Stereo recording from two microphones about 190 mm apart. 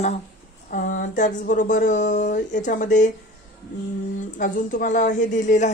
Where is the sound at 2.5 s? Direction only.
40° left (ahead or behind).